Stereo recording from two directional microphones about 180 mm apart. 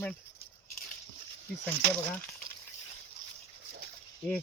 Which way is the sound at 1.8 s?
65° right (ahead or behind).